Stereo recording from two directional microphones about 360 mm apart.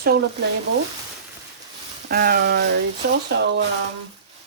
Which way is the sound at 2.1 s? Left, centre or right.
Right.